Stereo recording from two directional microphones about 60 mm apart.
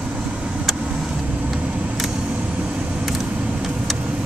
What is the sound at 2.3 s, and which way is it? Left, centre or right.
Vehicle, right.